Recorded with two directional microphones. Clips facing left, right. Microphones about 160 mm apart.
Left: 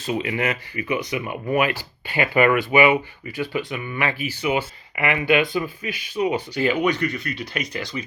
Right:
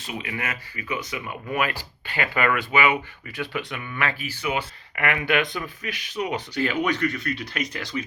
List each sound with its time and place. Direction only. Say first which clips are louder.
0.1 s speech: left 8 dB; 30° left (ahead or behind)
0.9 s speech: left 5 dB; 15° left (ahead or behind)
3.3 s speech: left 4 dB; centre (ahead or behind)